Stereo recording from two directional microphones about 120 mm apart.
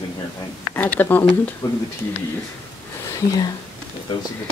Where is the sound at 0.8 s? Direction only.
15° left (ahead or behind).